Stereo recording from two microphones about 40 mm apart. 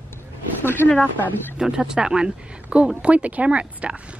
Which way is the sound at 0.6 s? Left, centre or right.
Left.